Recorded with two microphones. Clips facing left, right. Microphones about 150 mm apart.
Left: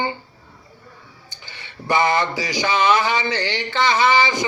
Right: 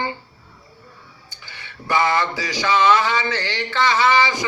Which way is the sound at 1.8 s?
20° left (ahead or behind).